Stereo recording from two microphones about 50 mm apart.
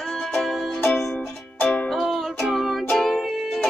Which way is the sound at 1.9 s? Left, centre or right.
Centre.